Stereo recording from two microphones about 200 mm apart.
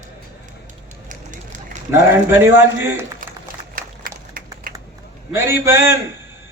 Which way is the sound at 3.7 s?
45° right (ahead or behind).